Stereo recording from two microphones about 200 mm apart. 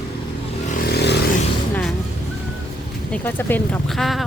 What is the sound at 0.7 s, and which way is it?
Vehicle, 50° left (ahead or behind).